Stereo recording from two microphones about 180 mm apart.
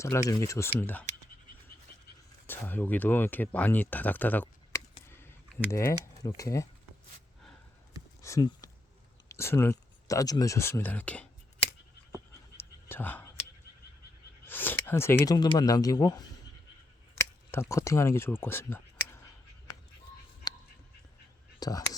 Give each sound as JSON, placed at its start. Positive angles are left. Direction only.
{"t": 0.0, "sound": "speech", "side_deg": 15}
{"t": 2.5, "sound": "speech", "side_deg": 10}
{"t": 8.2, "sound": "a sound", "side_deg": 20}
{"t": 9.3, "sound": "speech", "side_deg": 15}
{"t": 12.5, "sound": "whispering", "side_deg": 10}
{"t": 14.4, "sound": "speech", "side_deg": 10}
{"t": 17.2, "sound": "a sound", "side_deg": 15}
{"t": 20.4, "sound": "a sound", "side_deg": 20}
{"t": 21.6, "sound": "speech", "side_deg": 20}